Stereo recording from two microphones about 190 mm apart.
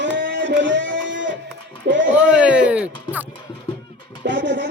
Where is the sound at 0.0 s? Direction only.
70° right (ahead or behind).